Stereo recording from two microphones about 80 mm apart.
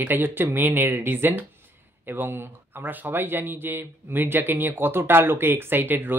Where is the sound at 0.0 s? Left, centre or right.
Right.